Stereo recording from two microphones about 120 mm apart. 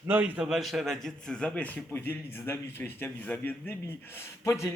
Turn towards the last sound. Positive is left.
turn(degrees=25)  # may be behind; listen again after turning